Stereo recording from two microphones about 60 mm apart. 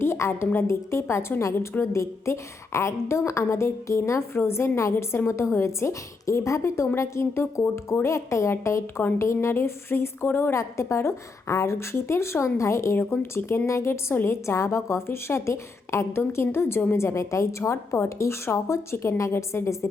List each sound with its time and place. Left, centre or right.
0.0 s a woman's voice: left
10.6 s a woman's voice: left